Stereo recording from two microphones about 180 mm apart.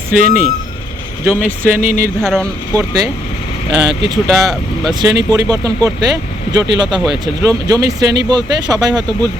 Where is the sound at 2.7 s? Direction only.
20° right (ahead or behind).